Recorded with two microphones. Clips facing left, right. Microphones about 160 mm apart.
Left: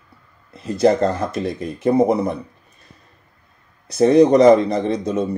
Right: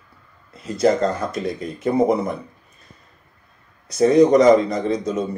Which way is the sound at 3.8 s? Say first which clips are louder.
Left 1 dB; 30° left (ahead or behind).